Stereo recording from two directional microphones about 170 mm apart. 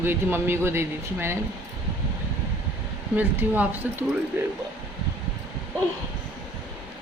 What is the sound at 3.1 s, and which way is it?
A man's voice, 10° right (ahead or behind).